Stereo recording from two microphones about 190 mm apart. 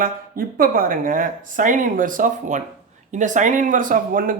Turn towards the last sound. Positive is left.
turn(degrees=-45)  # may be behind; listen again after turning